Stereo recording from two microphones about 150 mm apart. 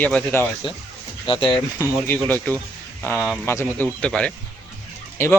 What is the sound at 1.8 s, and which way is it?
Speech, 15° left (ahead or behind).